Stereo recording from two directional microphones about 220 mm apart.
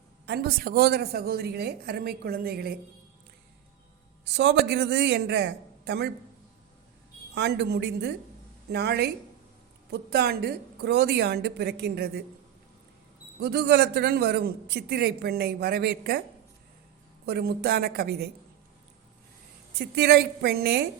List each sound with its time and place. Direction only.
0.3 s a man's voice: 45° right (ahead or behind)
4.3 s a man's voice: 50° right (ahead or behind)
7.3 s a man's voice: 50° right (ahead or behind)
13.4 s a man's voice: 45° right (ahead or behind)
17.2 s a man's voice: 45° right (ahead or behind)
19.8 s a man's voice: 50° right (ahead or behind)